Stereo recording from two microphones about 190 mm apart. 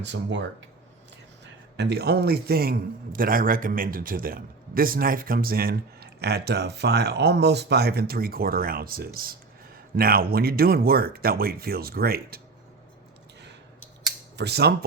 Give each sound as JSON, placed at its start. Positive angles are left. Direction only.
{"t": 0.0, "sound": "speech", "side_deg": -70}
{"t": 1.7, "sound": "a man's voice", "side_deg": -60}
{"t": 14.3, "sound": "speech", "side_deg": -60}